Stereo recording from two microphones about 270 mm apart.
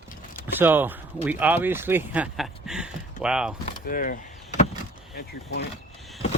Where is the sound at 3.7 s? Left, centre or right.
Left.